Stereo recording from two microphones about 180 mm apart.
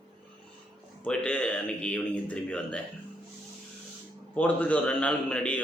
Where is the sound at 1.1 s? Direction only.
5° left (ahead or behind).